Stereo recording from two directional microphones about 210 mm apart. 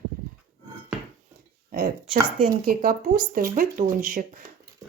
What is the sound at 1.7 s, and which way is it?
Speech, 45° right (ahead or behind).